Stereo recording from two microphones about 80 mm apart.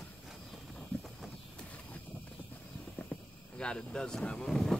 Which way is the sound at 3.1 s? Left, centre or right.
Left.